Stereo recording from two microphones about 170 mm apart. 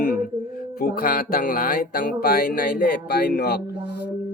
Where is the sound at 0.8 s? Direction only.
60° left (ahead or behind).